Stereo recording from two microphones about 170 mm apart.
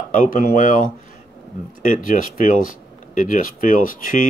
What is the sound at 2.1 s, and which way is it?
Speech, 55° left (ahead or behind).